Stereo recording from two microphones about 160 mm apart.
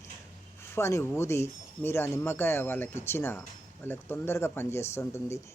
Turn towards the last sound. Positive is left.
turn(degrees=15)  # may be behind; listen again after turning